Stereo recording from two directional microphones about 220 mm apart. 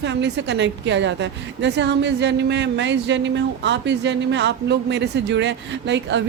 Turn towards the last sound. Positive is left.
turn(degrees=-55)  # may be behind; listen again after turning